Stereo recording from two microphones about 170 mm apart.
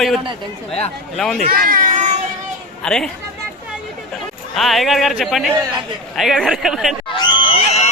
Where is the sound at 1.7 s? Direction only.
50° right (ahead or behind).